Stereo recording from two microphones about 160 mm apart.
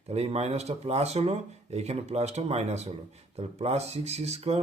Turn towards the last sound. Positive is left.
turn(degrees=-40)  # may be behind; listen again after turning